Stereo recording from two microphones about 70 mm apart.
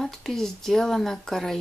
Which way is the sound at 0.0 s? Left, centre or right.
Centre.